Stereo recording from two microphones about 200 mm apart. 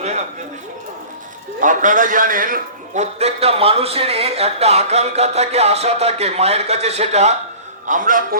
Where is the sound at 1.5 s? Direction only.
40° right (ahead or behind).